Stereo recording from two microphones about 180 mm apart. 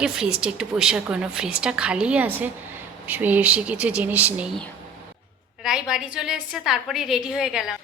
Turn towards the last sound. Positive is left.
turn(degrees=-5)  # may be behind; listen again after turning